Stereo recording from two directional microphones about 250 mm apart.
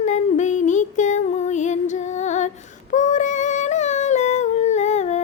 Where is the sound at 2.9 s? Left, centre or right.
Left.